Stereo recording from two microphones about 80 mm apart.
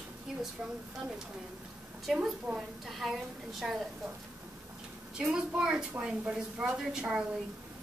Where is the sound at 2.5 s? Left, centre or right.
Right.